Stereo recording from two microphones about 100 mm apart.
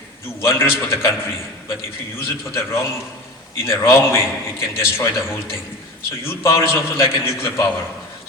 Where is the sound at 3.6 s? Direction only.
25° left (ahead or behind).